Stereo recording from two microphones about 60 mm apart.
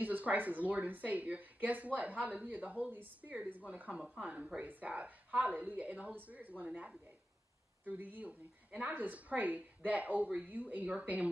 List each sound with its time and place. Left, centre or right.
0.0 s speech: right